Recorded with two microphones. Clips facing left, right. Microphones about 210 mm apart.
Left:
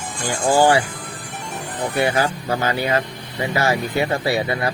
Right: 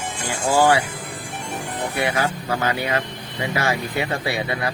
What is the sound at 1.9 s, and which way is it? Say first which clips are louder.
Speech: left 4 dB; 30° left (ahead or behind).